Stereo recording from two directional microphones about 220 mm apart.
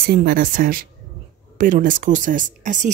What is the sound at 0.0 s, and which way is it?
Speech, 45° right (ahead or behind).